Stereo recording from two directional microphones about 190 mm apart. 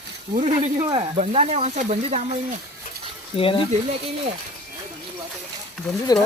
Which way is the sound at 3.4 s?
30° left (ahead or behind).